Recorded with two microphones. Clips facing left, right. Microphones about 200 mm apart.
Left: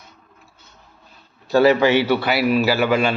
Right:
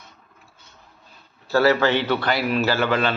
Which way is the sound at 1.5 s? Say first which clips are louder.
Left 4 dB; 15° left (ahead or behind).